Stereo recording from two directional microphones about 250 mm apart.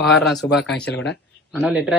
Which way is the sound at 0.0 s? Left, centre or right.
Centre.